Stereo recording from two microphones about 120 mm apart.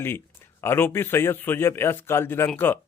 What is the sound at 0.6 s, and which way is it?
A man's voice, 20° left (ahead or behind).